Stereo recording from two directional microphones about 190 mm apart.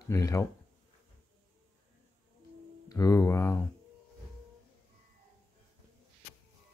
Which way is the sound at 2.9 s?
20° left (ahead or behind).